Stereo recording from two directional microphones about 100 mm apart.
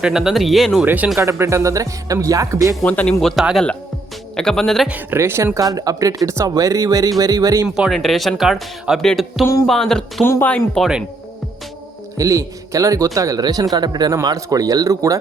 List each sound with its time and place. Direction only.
0.0 s speech: 5° right (ahead or behind)
0.9 s speech: 15° right (ahead or behind)
1.2 s speech: 30° right (ahead or behind)
2.8 s speech: 15° left (ahead or behind)
3.2 s speech: 5° left (ahead or behind)
4.9 s speech: 20° right (ahead or behind)
7.8 s speech: centre (ahead or behind)
10.2 s speech: 25° left (ahead or behind)
10.8 s speech: 5° left (ahead or behind)
12.1 s a man's voice: 35° right (ahead or behind)